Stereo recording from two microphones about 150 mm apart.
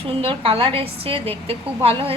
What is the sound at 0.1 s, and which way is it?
A woman's voice, 40° right (ahead or behind).